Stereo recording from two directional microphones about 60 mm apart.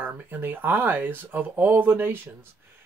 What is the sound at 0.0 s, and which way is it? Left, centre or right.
Speech, right.